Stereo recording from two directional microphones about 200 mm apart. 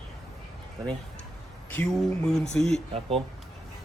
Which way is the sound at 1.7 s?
5° left (ahead or behind).